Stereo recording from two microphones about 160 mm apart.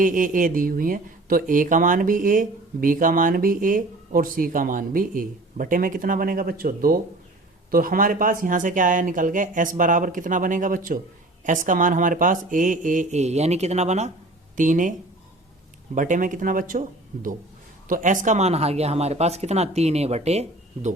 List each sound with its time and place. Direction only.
0.0 s speech: 55° right (ahead or behind)
16.0 s speech: 55° right (ahead or behind)
17.8 s speech: 55° right (ahead or behind)